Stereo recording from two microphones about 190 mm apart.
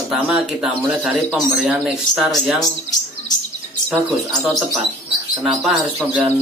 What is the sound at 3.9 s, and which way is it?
Speech, centre (ahead or behind).